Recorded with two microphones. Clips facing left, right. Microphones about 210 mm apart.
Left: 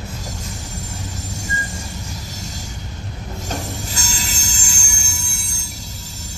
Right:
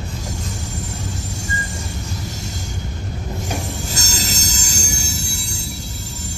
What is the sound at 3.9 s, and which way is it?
Music, 40° right (ahead or behind).